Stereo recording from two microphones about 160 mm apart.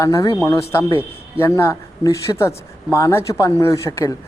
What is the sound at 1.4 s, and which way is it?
Speech, 15° left (ahead or behind).